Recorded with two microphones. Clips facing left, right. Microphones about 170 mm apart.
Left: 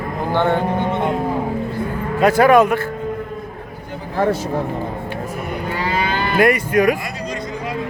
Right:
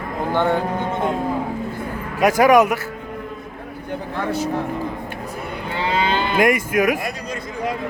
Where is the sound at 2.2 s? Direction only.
10° right (ahead or behind).